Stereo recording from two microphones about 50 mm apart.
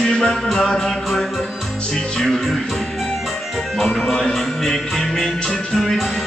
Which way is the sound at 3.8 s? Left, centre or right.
Centre.